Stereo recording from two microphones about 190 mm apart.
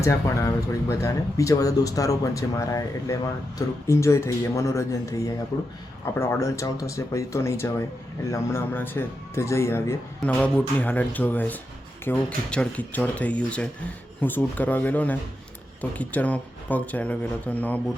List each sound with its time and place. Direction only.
0.0 s speech: 15° left (ahead or behind)